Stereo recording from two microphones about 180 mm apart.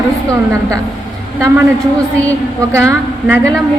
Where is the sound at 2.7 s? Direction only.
15° right (ahead or behind).